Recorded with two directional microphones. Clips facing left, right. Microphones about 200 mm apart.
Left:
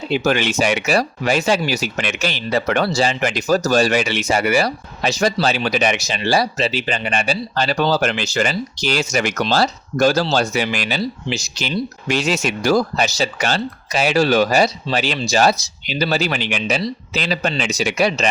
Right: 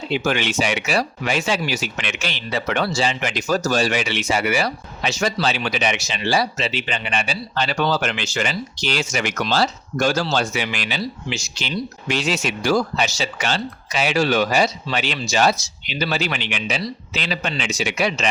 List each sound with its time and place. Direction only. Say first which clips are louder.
0.1 s speech: left 4 dB; 40° left (ahead or behind)